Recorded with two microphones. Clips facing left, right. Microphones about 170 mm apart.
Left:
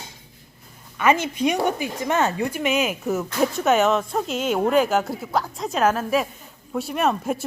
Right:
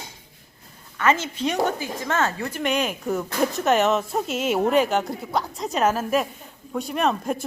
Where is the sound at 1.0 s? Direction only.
15° left (ahead or behind).